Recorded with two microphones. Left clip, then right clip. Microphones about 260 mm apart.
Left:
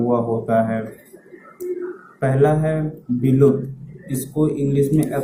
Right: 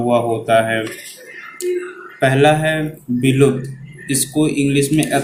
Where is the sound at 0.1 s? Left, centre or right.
Right.